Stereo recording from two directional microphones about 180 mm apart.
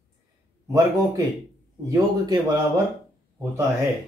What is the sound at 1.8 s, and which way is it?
Speech, 20° right (ahead or behind).